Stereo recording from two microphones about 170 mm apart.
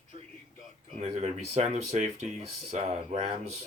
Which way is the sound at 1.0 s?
40° right (ahead or behind).